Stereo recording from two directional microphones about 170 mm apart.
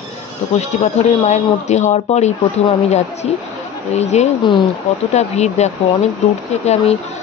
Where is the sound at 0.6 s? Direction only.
40° left (ahead or behind).